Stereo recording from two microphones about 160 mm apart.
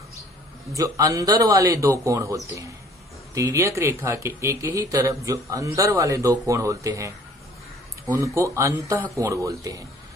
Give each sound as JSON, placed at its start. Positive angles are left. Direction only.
{"t": 0.7, "sound": "speech", "side_deg": -20}